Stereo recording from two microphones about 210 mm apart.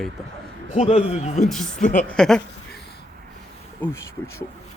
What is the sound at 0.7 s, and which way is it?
A woman's voice, 30° left (ahead or behind).